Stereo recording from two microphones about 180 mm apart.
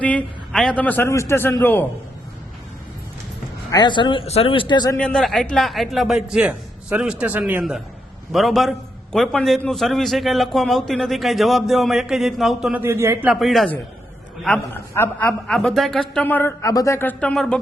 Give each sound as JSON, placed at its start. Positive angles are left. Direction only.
{"t": 0.0, "sound": "a man's voice", "side_deg": 10}
{"t": 3.7, "sound": "speech", "side_deg": 25}
{"t": 4.9, "sound": "a man's voice", "side_deg": 5}
{"t": 13.3, "sound": "a man's voice", "side_deg": 0}